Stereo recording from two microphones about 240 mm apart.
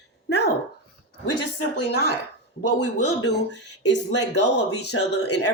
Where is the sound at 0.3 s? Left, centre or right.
Left.